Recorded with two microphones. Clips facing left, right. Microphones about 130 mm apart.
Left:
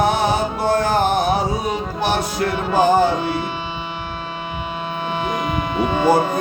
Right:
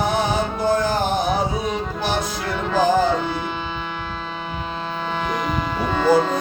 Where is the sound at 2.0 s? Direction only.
60° left (ahead or behind).